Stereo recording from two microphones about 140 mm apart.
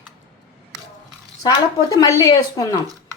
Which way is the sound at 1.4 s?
25° left (ahead or behind).